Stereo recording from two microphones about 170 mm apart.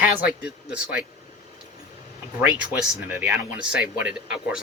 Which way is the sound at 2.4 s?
5° right (ahead or behind).